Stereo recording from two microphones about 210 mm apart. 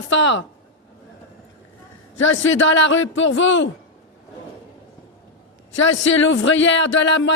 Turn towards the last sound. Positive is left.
turn(degrees=60)  # may be behind; listen again after turning